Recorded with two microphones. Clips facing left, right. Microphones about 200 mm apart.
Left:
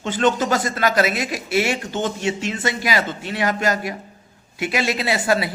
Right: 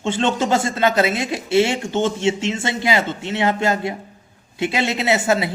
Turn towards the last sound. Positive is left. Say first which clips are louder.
# right 2 dB
turn(degrees=-25)  # may be behind; listen again after turning